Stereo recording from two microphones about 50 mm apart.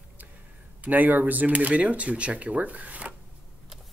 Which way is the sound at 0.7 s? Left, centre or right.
Right.